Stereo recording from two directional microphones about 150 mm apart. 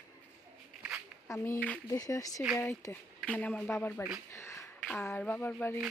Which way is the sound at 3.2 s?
5° left (ahead or behind).